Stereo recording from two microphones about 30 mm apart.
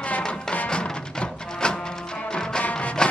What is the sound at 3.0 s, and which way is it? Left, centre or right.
Music, left.